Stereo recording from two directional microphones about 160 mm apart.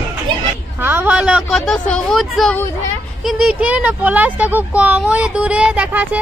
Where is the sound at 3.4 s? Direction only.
10° right (ahead or behind).